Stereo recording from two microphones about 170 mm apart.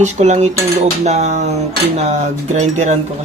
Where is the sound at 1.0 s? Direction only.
40° right (ahead or behind).